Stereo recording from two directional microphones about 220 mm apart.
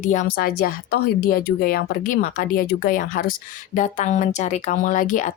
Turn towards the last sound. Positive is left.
turn(degrees=35)  # may be behind; listen again after turning